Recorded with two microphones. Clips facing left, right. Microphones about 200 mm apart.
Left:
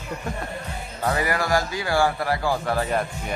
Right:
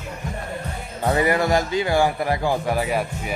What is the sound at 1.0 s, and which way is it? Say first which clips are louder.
Speech: right 5 dB; 25° right (ahead or behind).